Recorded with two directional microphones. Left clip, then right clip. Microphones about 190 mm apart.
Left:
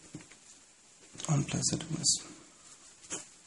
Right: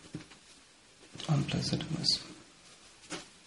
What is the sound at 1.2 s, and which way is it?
Speech, 15° left (ahead or behind).